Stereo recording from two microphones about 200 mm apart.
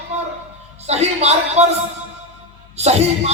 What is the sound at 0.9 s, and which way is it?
Speech, 30° right (ahead or behind).